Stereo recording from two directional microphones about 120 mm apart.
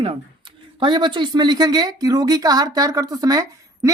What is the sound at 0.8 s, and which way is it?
A woman's voice, 40° right (ahead or behind).